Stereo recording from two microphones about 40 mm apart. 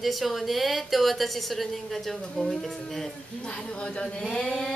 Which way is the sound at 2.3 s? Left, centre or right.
Centre.